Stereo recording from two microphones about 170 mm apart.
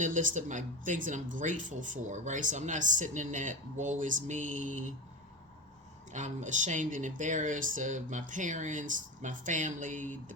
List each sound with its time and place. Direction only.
0.0 s speech: 50° right (ahead or behind)
6.1 s speech: 45° right (ahead or behind)